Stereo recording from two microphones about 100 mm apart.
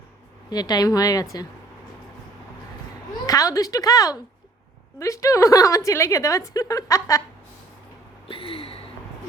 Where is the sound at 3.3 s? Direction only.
35° left (ahead or behind).